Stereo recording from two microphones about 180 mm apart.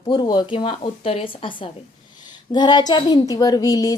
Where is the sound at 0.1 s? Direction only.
25° left (ahead or behind).